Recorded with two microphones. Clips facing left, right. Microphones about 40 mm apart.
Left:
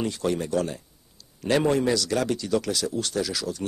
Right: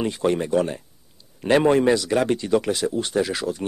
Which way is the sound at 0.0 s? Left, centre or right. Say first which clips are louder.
Right 4 dB; right.